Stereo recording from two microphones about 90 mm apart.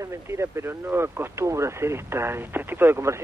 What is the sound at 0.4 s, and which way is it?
A man's voice, 30° right (ahead or behind).